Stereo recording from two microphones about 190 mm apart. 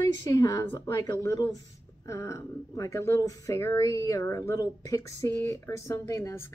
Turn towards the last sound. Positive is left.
turn(degrees=15)  # may be behind; listen again after turning